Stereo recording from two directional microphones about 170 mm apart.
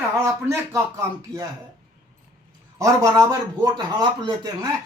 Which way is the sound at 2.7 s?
15° right (ahead or behind).